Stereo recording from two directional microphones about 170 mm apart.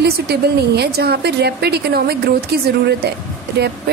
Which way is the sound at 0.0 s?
75° right (ahead or behind).